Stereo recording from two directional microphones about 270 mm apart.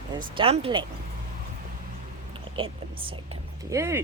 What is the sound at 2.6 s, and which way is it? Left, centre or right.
Speech, centre.